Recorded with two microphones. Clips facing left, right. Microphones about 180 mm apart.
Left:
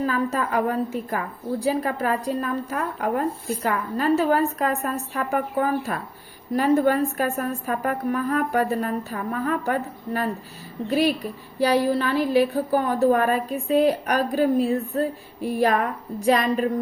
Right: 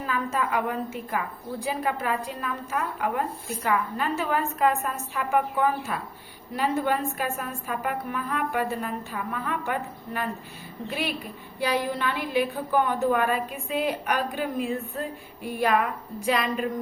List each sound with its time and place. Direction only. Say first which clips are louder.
0.0 s a woman's voice: left 4 dB; 40° left (ahead or behind)